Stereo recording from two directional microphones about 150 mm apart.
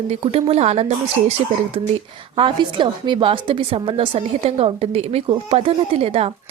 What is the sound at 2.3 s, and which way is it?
A woman's voice, 35° right (ahead or behind).